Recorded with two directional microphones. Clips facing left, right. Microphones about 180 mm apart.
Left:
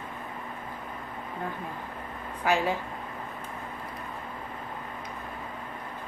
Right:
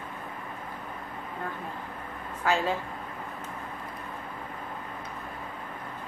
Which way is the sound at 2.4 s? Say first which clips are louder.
Left 1 dB; 15° left (ahead or behind).